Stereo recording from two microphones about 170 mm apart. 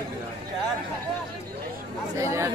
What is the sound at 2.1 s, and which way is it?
Speech, 15° right (ahead or behind).